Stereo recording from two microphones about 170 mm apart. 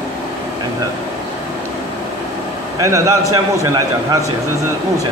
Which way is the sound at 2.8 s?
20° right (ahead or behind).